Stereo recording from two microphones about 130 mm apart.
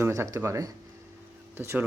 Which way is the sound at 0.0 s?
25° right (ahead or behind).